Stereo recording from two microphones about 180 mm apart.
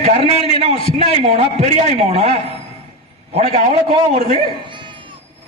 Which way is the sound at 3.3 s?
35° right (ahead or behind).